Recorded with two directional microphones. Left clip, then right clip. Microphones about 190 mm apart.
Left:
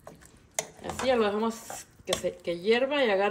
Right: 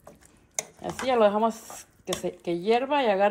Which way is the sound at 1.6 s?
Centre (ahead or behind).